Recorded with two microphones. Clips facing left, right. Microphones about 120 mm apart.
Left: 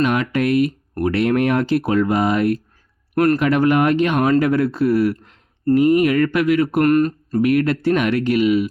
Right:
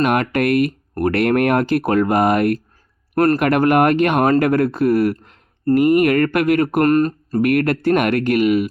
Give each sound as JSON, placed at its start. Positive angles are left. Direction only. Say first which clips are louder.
{"t": 0.0, "sound": "speech", "louder": "right 1 dB", "side_deg": -55}
{"t": 3.2, "sound": "speech", "louder": "right 1 dB", "side_deg": -40}
{"t": 3.4, "sound": "speech", "louder": "right 1 dB", "side_deg": -55}
{"t": 7.4, "sound": "speech", "louder": "even", "side_deg": -55}